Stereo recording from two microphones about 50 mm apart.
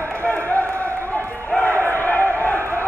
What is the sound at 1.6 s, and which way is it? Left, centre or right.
Crowd, left.